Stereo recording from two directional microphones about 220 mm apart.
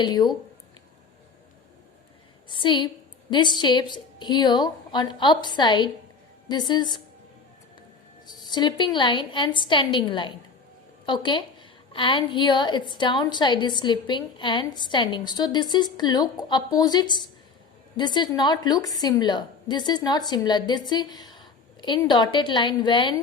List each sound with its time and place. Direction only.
0.0 s a woman's voice: 20° left (ahead or behind)
2.5 s a woman's voice: 20° left (ahead or behind)
8.3 s a woman's voice: 20° left (ahead or behind)